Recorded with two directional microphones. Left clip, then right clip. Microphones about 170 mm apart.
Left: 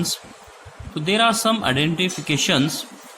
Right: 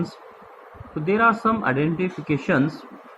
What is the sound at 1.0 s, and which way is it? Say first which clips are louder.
Speech: left 1 dB; 90° left.